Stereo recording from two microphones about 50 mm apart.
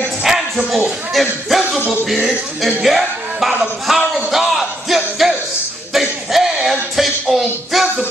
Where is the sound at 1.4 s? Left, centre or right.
Centre.